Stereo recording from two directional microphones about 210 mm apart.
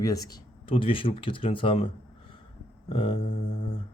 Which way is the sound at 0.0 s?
15° left (ahead or behind).